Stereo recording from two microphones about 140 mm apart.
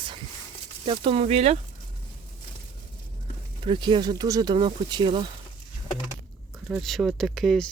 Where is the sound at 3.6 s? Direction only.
35° right (ahead or behind).